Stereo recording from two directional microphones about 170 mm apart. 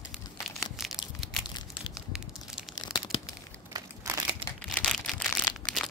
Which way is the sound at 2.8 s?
25° left (ahead or behind).